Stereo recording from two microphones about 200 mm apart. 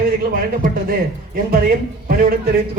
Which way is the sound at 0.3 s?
45° right (ahead or behind).